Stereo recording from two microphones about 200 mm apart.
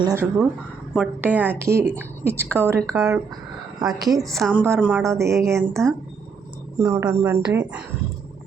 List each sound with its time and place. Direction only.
0.0 s a woman's voice: 15° right (ahead or behind)
4.4 s speech: centre (ahead or behind)
4.6 s a woman's voice: 10° right (ahead or behind)
5.5 s speech: centre (ahead or behind)
6.7 s a woman's voice: 10° right (ahead or behind)